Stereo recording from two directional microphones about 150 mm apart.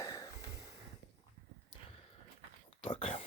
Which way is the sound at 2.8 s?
35° left (ahead or behind).